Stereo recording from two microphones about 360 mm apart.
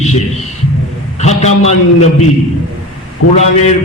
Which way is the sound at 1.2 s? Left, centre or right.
Centre.